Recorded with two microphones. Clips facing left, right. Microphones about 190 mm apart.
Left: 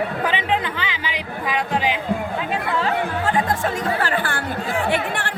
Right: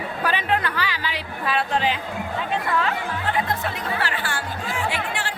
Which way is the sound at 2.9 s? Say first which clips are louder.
Left 4 dB; 45° left (ahead or behind).